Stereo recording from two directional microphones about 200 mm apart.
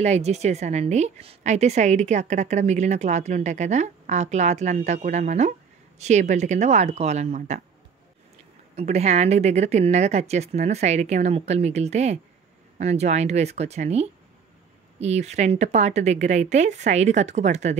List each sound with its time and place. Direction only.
0.0 s a woman's voice: 35° right (ahead or behind)
8.7 s a woman's voice: 30° right (ahead or behind)